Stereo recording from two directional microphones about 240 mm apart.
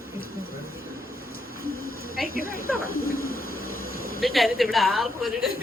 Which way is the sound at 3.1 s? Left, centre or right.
Left.